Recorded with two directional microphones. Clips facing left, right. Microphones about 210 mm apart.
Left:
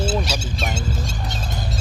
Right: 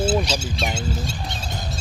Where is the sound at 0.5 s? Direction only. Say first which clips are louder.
Right 1 dB; 45° left (ahead or behind).